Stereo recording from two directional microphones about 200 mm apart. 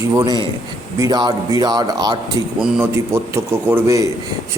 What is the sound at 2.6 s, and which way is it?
A man's voice, 5° right (ahead or behind).